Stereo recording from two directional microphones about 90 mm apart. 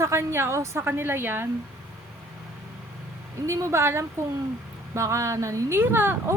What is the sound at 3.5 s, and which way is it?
Speech, 35° right (ahead or behind).